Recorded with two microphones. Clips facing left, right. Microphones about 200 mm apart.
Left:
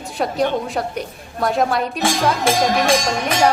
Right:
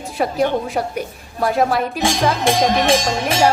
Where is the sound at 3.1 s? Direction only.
25° right (ahead or behind).